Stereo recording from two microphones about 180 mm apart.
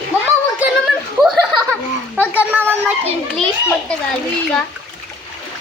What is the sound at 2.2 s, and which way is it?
Speech, 10° right (ahead or behind).